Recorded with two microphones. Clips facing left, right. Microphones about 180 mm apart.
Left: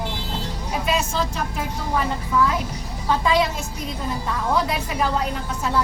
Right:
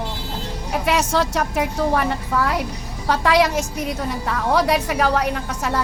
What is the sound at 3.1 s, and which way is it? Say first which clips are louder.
A woman's voice: right 3 dB; 80° right.